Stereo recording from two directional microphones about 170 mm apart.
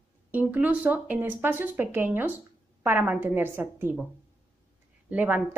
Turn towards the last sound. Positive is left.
turn(degrees=-10)  # may be behind; listen again after turning